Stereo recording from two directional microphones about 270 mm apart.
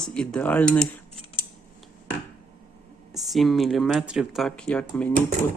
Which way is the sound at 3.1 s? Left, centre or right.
Centre.